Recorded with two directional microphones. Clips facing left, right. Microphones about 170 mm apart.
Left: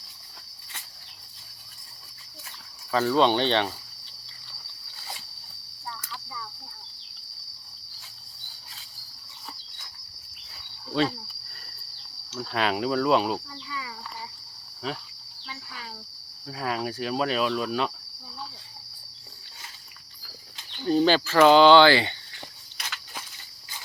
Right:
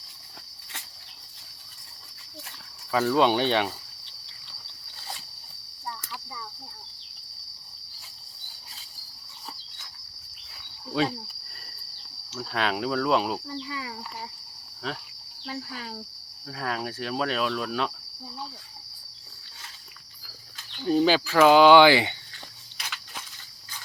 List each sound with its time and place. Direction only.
2.9 s speech: 5° right (ahead or behind)
10.8 s a sound: 5° right (ahead or behind)
12.3 s speech: centre (ahead or behind)
13.7 s speech: 35° right (ahead or behind)
14.8 s speech: centre (ahead or behind)
15.4 s cricket: 45° right (ahead or behind)
16.5 s speech: 5° left (ahead or behind)
20.8 s speech: 5° right (ahead or behind)
22.8 s a sound: centre (ahead or behind)